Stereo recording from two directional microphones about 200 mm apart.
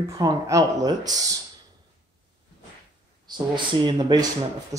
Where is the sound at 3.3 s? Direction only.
25° right (ahead or behind).